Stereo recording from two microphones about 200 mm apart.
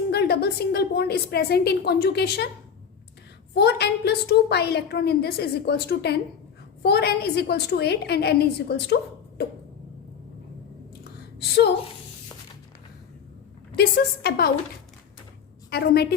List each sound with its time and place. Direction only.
0.1 s a woman's voice: 50° left (ahead or behind)
3.5 s a woman's voice: 55° left (ahead or behind)
11.3 s a woman's voice: 55° left (ahead or behind)
13.7 s a woman's voice: 50° left (ahead or behind)
15.7 s a woman's voice: 50° left (ahead or behind)